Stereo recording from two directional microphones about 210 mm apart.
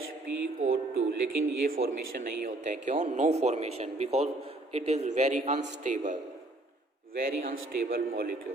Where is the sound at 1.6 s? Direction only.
45° right (ahead or behind).